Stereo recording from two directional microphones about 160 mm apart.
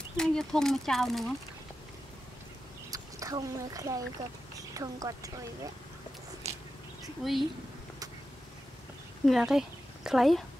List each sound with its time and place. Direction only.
0.2 s speech: 5° left (ahead or behind)
2.9 s speech: 20° right (ahead or behind)
7.2 s speech: centre (ahead or behind)
9.2 s a woman's voice: centre (ahead or behind)